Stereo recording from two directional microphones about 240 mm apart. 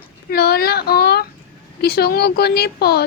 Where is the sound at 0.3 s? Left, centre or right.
Left.